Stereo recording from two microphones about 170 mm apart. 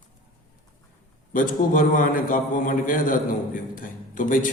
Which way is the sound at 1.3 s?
50° left (ahead or behind).